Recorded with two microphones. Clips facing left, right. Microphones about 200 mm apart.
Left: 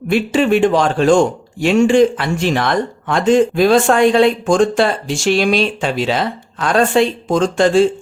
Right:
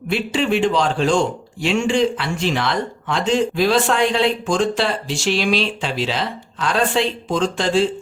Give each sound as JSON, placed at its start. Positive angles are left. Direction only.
{"t": 0.1, "sound": "a man's voice", "side_deg": 50}